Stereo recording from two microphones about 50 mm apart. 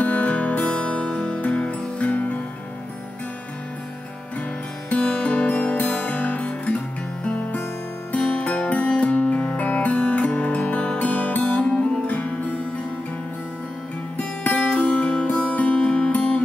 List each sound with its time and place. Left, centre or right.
0.0 s music: left
5.0 s music: centre
5.3 s music: left
11.1 s music: left
14.1 s music: left